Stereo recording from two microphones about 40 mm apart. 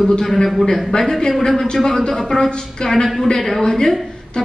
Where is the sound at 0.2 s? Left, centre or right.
Centre.